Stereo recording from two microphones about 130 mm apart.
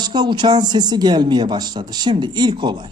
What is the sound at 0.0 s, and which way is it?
Speech, 35° right (ahead or behind).